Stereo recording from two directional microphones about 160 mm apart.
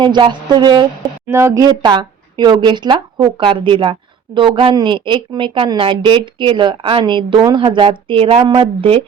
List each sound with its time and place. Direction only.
0.0 s a woman's voice: 30° right (ahead or behind)